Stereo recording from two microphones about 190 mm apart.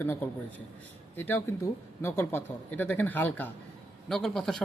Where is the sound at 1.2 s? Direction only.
10° left (ahead or behind).